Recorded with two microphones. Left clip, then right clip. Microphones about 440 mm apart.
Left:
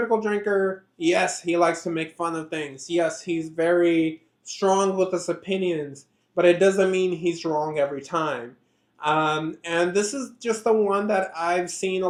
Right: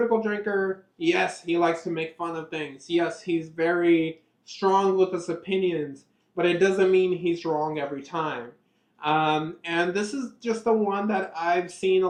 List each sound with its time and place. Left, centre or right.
0.2 s speech: left